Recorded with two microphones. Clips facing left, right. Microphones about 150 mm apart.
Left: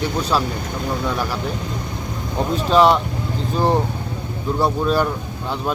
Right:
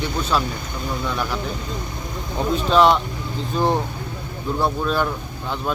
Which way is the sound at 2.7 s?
5° left (ahead or behind).